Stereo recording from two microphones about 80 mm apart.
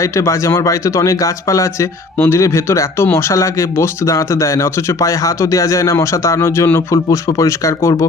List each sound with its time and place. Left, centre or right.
0.0 s speech: left